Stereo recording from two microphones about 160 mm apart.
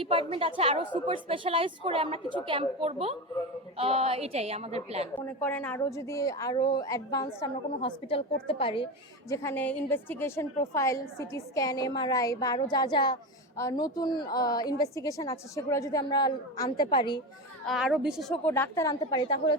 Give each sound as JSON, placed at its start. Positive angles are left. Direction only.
{"t": 0.0, "sound": "a woman's voice", "side_deg": -35}
{"t": 5.4, "sound": "a woman's voice", "side_deg": 10}
{"t": 5.8, "sound": "a woman's voice", "side_deg": 20}
{"t": 7.8, "sound": "a woman's voice", "side_deg": 35}
{"t": 9.3, "sound": "a woman's voice", "side_deg": 15}
{"t": 17.7, "sound": "speech", "side_deg": 0}
{"t": 18.4, "sound": "a woman's voice", "side_deg": 15}